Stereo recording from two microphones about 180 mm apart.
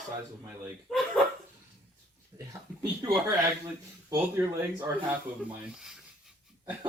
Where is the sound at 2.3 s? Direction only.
25° right (ahead or behind).